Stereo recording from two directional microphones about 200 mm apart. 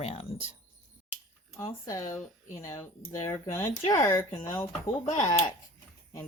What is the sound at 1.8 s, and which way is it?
Speech, 15° left (ahead or behind).